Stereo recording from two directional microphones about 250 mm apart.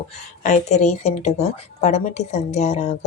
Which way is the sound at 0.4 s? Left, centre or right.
Left.